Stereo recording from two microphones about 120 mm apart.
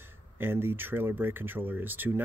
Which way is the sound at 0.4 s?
20° right (ahead or behind).